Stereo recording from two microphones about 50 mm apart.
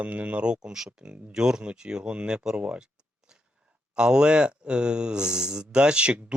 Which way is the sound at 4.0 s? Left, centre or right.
Centre.